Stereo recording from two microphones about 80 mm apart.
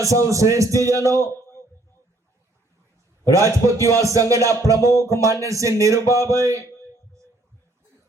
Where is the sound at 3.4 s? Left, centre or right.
Right.